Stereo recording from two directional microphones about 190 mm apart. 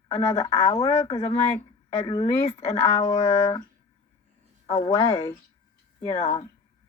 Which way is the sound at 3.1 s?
30° left (ahead or behind).